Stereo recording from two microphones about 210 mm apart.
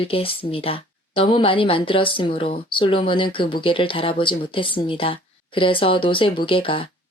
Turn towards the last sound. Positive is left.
turn(degrees=25)  # may be behind; listen again after turning